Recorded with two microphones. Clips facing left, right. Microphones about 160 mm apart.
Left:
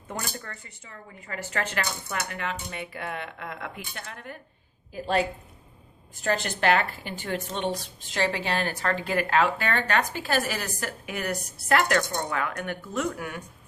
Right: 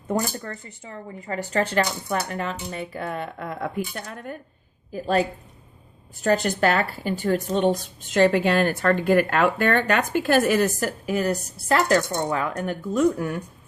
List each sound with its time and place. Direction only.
0.1 s speech: 40° right (ahead or behind)